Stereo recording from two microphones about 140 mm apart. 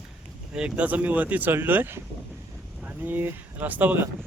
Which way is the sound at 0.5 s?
10° right (ahead or behind).